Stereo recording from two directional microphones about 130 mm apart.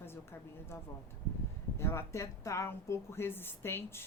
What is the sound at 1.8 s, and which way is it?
A woman's voice, 20° left (ahead or behind).